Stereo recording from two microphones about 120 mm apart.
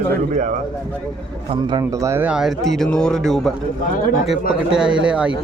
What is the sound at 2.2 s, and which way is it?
A man's voice, 5° right (ahead or behind).